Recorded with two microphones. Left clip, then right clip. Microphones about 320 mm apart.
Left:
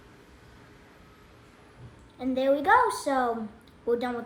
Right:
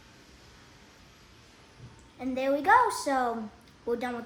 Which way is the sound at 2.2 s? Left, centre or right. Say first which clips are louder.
Left 3 dB; centre.